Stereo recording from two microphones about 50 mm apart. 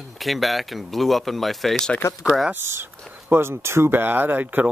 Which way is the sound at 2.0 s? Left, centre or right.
Left.